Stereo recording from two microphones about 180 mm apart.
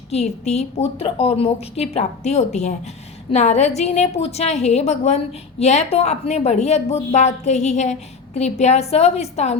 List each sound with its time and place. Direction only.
0.1 s a woman's voice: 35° left (ahead or behind)